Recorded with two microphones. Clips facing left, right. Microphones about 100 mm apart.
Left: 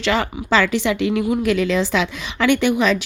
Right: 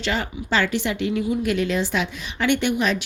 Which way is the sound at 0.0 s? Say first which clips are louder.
Left 5 dB; 90° left.